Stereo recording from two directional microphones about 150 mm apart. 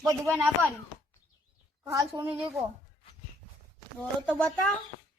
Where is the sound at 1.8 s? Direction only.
20° right (ahead or behind).